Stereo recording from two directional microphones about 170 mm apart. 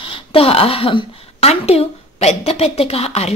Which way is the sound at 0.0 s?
30° left (ahead or behind).